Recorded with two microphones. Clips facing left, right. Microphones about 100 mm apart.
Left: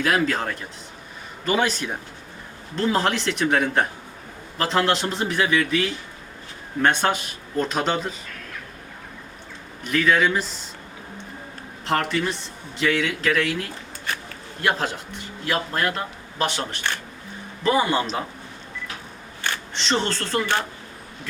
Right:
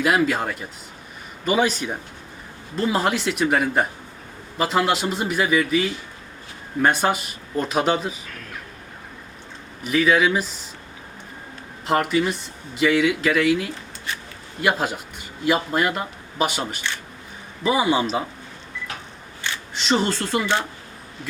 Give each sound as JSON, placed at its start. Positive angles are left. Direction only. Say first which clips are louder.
{"t": 0.0, "sound": "a man's voice", "louder": "right 2 dB", "side_deg": -10}
{"t": 9.8, "sound": "speech", "louder": "right 2 dB", "side_deg": -5}
{"t": 11.9, "sound": "a man's voice", "louder": "right 3 dB", "side_deg": -5}
{"t": 14.1, "sound": "a sound", "louder": "left 2 dB", "side_deg": 50}
{"t": 14.6, "sound": "a man's voice", "louder": "right 2 dB", "side_deg": -10}
{"t": 19.7, "sound": "a man's voice", "louder": "right 4 dB", "side_deg": -5}